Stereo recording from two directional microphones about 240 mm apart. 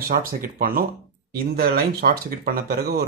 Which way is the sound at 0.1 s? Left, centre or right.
Right.